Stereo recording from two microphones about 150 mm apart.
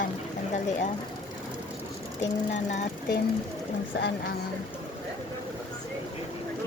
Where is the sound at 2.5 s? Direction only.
55° left (ahead or behind).